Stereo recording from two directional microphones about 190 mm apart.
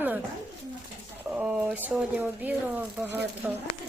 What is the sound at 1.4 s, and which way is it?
Speech, 5° right (ahead or behind).